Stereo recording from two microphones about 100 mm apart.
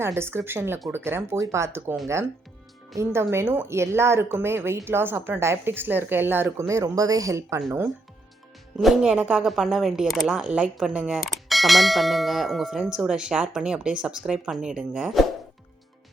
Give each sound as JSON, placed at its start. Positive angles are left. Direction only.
{"t": 0.0, "sound": "a woman's voice", "side_deg": -25}
{"t": 8.8, "sound": "a woman's voice", "side_deg": -5}